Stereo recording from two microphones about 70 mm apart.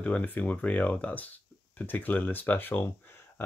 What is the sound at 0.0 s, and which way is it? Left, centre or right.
Speech, left.